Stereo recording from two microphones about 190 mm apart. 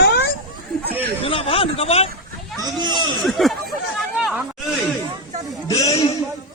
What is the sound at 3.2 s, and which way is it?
Speech, centre (ahead or behind).